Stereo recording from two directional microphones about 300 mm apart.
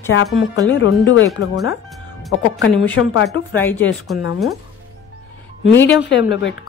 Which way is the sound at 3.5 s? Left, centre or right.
Centre.